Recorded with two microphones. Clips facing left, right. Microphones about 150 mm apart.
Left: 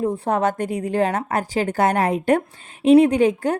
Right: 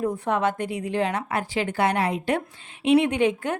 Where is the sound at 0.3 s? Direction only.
45° left (ahead or behind).